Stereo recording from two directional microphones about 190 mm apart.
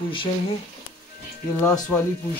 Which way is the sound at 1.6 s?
10° left (ahead or behind).